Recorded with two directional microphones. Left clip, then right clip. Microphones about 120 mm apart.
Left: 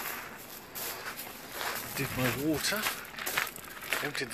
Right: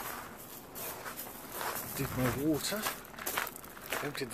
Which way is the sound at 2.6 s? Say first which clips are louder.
Left 4 dB; centre (ahead or behind).